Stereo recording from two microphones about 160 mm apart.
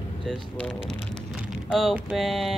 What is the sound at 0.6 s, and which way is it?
Speech, centre (ahead or behind).